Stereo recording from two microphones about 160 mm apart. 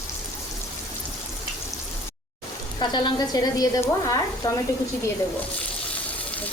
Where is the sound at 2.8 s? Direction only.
30° left (ahead or behind).